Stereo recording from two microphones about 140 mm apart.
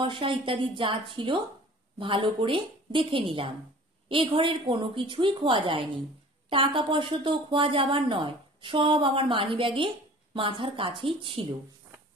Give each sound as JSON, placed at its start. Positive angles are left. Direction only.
{"t": 0.0, "sound": "speech", "side_deg": -35}